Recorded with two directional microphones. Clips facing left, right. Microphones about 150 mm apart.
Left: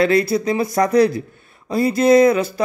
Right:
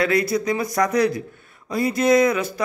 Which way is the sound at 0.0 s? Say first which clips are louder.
Left 4 dB; 30° left (ahead or behind).